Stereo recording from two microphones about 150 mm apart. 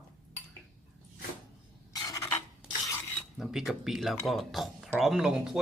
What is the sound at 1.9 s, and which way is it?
Filing, 25° left (ahead or behind).